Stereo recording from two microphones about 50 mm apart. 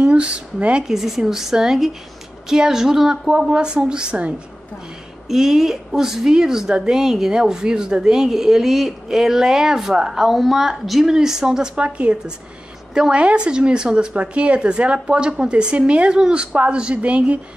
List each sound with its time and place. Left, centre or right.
0.0 s speech: right
0.8 s a woman's voice: centre
5.3 s a woman's voice: centre; by 17.4 s right